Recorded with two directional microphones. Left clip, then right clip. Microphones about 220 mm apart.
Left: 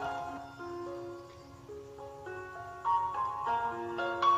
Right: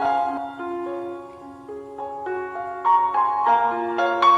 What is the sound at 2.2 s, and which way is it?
Music, 35° right (ahead or behind).